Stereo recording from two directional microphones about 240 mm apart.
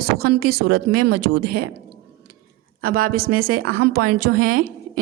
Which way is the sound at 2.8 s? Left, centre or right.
Right.